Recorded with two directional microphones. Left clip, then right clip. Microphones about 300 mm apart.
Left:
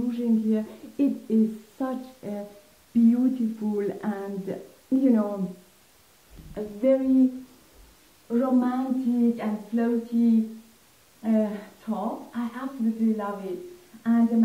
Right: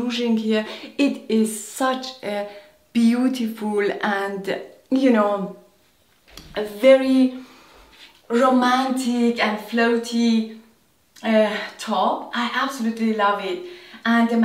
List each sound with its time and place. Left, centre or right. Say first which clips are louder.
0.5 s speech: right 6 dB; centre
6.5 s speech: right 9 dB; centre
8.3 s speech: right 8 dB; centre
11.9 s speech: right 11 dB; right
12.3 s speech: right 12 dB; centre